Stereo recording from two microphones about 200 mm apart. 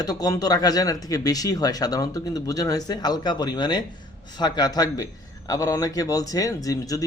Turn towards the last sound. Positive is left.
turn(degrees=15)  # may be behind; listen again after turning